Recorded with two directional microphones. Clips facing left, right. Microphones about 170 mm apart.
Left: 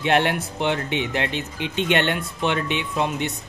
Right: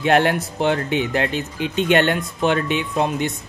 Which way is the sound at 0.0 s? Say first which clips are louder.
Right 3 dB; 40° right (ahead or behind).